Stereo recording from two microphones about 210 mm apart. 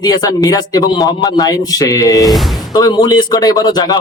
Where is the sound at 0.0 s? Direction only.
15° left (ahead or behind).